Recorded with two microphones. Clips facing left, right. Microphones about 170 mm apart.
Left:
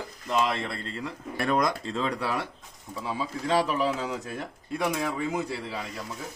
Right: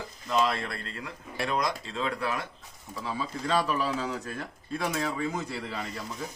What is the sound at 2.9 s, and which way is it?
A man's voice, 20° left (ahead or behind).